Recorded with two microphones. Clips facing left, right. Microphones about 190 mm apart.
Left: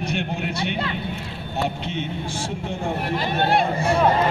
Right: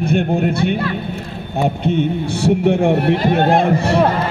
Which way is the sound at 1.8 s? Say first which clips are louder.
Right 11 dB; 55° right (ahead or behind).